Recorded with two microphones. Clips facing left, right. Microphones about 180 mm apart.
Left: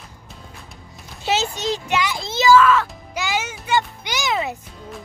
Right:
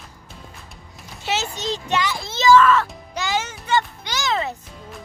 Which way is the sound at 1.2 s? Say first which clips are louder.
Left 4 dB; 15° left (ahead or behind).